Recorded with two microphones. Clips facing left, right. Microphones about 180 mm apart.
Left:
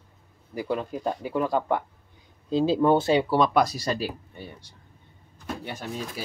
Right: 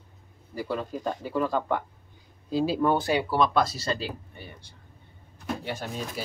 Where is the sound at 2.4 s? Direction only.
25° left (ahead or behind).